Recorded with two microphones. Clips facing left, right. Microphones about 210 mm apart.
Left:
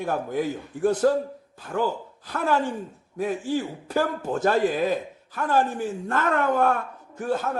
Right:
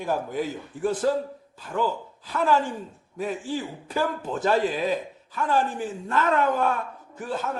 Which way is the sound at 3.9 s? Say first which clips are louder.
Left 2 dB; 50° left (ahead or behind).